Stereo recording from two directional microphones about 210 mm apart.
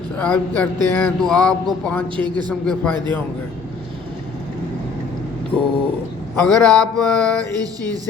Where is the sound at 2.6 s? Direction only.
5° left (ahead or behind).